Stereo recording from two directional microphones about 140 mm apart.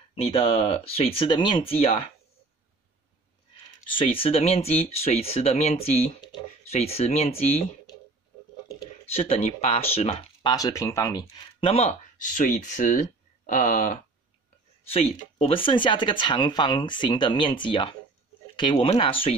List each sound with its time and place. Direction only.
0.1 s speech: 45° left (ahead or behind)
3.9 s speech: 40° left (ahead or behind)
9.1 s speech: 45° left (ahead or behind)
10.5 s speech: 25° left (ahead or behind)
11.6 s speech: 45° left (ahead or behind)
12.2 s speech: 70° left (ahead or behind)
14.9 s speech: 45° left (ahead or behind)